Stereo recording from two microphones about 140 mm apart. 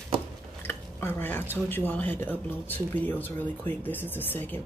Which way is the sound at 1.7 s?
10° left (ahead or behind).